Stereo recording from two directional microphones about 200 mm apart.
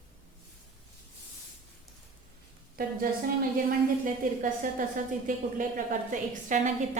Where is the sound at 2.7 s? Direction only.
45° right (ahead or behind).